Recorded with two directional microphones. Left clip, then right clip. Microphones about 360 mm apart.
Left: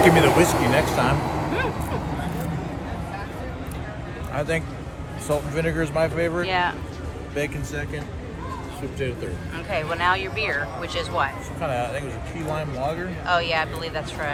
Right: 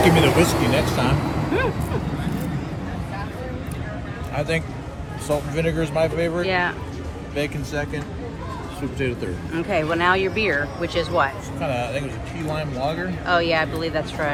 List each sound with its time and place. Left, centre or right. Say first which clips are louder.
0.0 s speech: left 1 dB; centre
0.4 s speech: even; left
4.4 s speech: right 1 dB; centre
9.5 s speech: right 5 dB; centre